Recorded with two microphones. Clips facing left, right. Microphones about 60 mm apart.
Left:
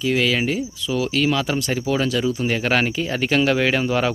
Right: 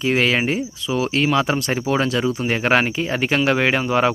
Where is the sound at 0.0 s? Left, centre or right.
Right.